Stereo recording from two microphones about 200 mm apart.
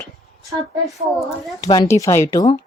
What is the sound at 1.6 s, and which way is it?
Speech, 20° left (ahead or behind).